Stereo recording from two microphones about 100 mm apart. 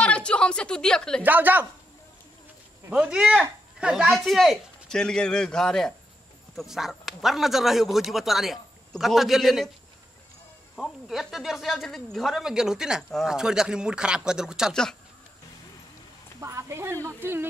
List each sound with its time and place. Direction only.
0.0 s a woman's voice: 10° left (ahead or behind)
1.2 s speech: 20° right (ahead or behind)
2.9 s speech: 10° right (ahead or behind)
10.8 s speech: centre (ahead or behind)
14.7 s speech: 5° left (ahead or behind)
16.3 s a woman's voice: 30° right (ahead or behind)